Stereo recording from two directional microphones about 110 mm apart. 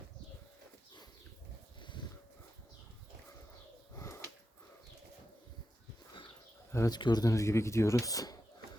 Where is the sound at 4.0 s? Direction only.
25° left (ahead or behind).